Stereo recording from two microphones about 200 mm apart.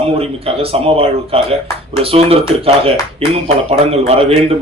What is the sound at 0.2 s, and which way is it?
Speech, 30° right (ahead or behind).